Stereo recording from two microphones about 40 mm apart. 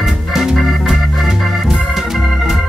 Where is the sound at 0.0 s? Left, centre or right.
Centre.